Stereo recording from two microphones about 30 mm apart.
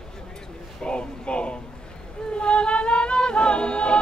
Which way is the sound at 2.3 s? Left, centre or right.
Left.